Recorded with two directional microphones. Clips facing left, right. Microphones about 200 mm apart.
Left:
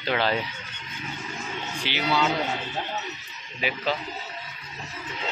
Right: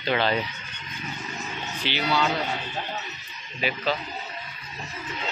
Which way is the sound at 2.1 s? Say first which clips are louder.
Left 1 dB; 5° left (ahead or behind).